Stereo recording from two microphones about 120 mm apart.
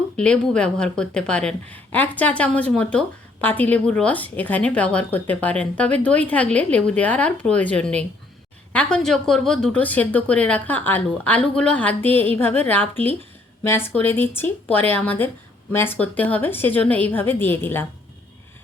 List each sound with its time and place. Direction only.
0.2 s a woman's voice: 10° left (ahead or behind)